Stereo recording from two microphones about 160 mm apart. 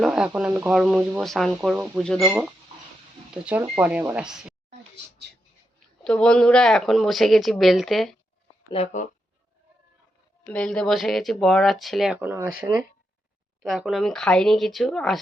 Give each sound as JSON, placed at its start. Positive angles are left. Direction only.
{"t": 0.0, "sound": "speech", "side_deg": -5}
{"t": 2.0, "sound": "speech", "side_deg": 5}
{"t": 3.3, "sound": "speech", "side_deg": -10}
{"t": 6.1, "sound": "speech", "side_deg": 5}
{"t": 8.7, "sound": "speech", "side_deg": 45}
{"t": 10.4, "sound": "speech", "side_deg": 5}
{"t": 12.2, "sound": "speech", "side_deg": -15}